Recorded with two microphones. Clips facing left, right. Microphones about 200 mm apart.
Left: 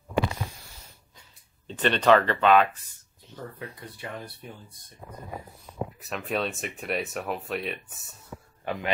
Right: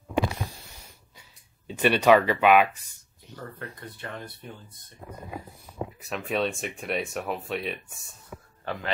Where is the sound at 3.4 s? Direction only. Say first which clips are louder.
Left 1 dB; 10° left (ahead or behind).